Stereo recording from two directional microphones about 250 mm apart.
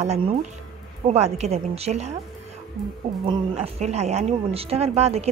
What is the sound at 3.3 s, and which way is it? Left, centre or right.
Speech, right.